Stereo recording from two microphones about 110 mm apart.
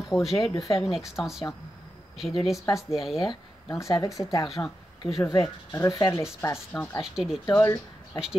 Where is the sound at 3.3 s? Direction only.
30° left (ahead or behind).